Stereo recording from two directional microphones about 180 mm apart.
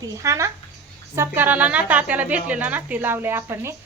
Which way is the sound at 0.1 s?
15° right (ahead or behind).